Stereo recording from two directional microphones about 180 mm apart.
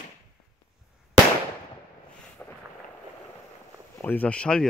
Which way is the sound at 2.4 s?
10° left (ahead or behind).